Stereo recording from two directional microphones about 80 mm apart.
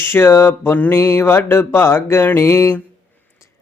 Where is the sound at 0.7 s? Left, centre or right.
Left.